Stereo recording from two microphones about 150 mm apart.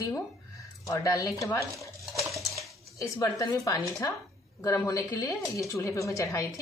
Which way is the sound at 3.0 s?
20° left (ahead or behind).